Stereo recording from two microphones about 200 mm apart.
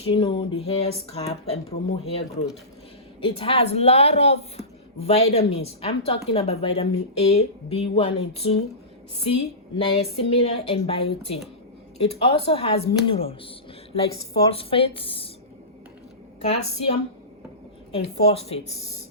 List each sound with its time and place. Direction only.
0.1 s a woman's voice: 25° left (ahead or behind)
9.7 s speech: 30° left (ahead or behind)
16.5 s a woman's voice: 30° left (ahead or behind)